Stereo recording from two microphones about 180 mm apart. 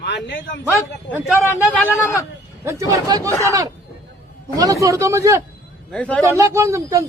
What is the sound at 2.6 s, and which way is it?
Speech, 20° right (ahead or behind).